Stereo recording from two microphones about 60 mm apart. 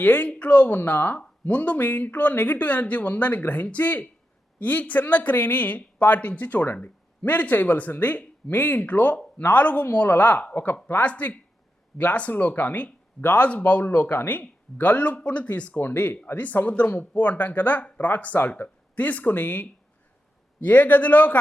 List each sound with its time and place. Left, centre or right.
0.0 s speech: left
0.7 s speech: left